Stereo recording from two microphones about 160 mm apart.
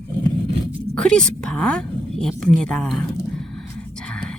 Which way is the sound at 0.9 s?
5° left (ahead or behind).